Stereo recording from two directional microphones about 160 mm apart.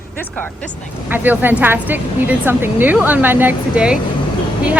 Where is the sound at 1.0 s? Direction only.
10° right (ahead or behind).